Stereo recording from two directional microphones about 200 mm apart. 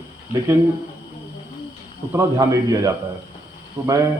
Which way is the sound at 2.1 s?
15° right (ahead or behind).